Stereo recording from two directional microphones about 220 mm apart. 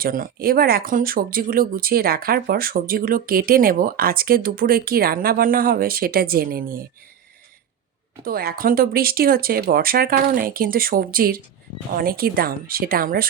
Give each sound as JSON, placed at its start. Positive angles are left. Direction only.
{"t": 0.0, "sound": "speech", "side_deg": -40}
{"t": 8.2, "sound": "speech", "side_deg": -45}